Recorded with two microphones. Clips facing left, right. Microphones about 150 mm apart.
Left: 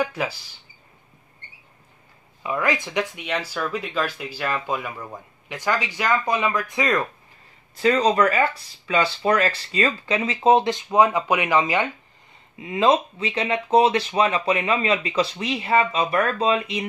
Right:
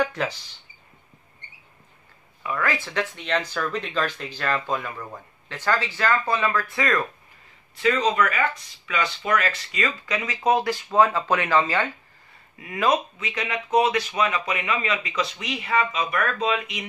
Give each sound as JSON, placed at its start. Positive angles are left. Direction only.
{"t": 0.0, "sound": "speech", "side_deg": 10}
{"t": 2.4, "sound": "speech", "side_deg": 20}
{"t": 7.7, "sound": "speech", "side_deg": 35}